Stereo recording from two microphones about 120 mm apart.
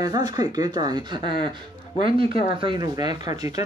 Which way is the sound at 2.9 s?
30° right (ahead or behind).